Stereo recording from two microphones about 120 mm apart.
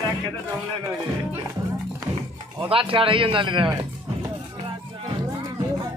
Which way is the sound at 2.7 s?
50° right (ahead or behind).